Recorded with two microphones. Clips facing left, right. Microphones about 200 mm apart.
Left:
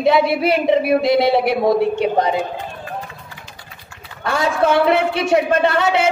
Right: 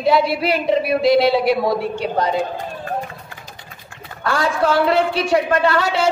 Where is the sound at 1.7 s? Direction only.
20° left (ahead or behind).